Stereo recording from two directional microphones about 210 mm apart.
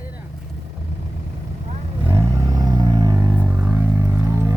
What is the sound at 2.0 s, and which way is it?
Vehicle, 15° right (ahead or behind).